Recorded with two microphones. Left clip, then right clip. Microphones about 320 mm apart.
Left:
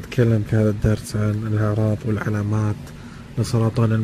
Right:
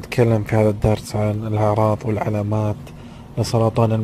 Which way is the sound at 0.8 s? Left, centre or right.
Right.